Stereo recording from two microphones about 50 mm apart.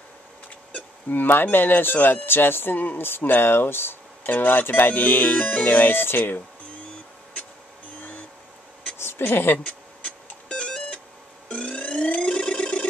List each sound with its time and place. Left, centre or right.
1.0 s speech: left
9.2 s speech: left
9.7 s music: left
11.4 s a sound: left